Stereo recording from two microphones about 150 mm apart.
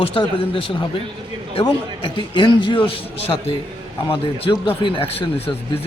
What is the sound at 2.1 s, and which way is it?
Speech, 30° left (ahead or behind).